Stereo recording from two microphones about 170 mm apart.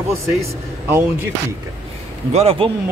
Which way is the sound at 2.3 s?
35° right (ahead or behind).